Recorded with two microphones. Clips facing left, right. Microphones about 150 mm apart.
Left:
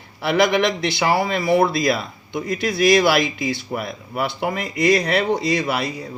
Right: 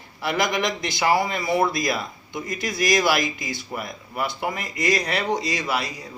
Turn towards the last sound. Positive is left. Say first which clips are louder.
# left 5 dB
turn(degrees=60)  # may be behind; listen again after turning